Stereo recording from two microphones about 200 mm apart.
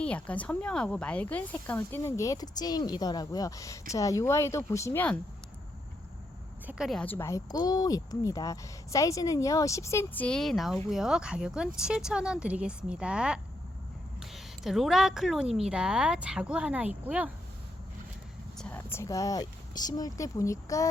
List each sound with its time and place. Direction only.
0.0 s speech: 5° left (ahead or behind)
6.7 s a woman's voice: centre (ahead or behind)
18.5 s speech: 5° left (ahead or behind)